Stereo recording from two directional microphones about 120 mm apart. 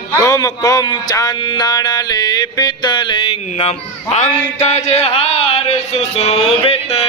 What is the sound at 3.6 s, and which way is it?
Speech, 70° left (ahead or behind).